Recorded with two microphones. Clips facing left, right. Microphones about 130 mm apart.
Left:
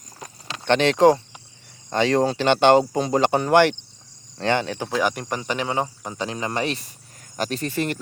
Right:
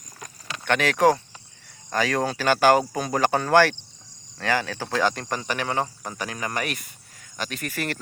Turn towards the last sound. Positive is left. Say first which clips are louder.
# left 5 dB
turn(degrees=25)  # may be behind; listen again after turning